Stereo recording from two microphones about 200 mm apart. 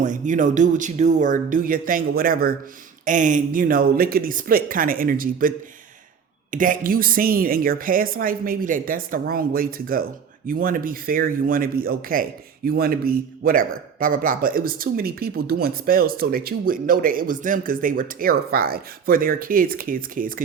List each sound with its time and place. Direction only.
0.0 s a man's voice: 40° right (ahead or behind)